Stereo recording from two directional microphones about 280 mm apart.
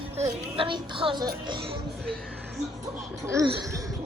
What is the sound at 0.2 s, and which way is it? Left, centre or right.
A woman's voice, right.